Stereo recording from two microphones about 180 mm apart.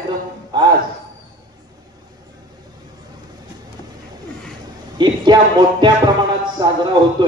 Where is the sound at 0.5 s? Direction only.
25° right (ahead or behind).